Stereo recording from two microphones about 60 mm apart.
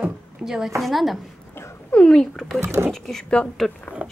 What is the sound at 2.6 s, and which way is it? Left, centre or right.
Speech, right.